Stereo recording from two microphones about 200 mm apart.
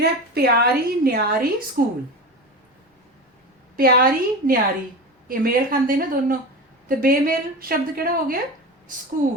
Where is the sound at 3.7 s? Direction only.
45° right (ahead or behind).